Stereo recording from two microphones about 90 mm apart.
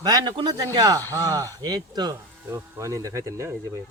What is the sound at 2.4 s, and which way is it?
Speech, 30° right (ahead or behind).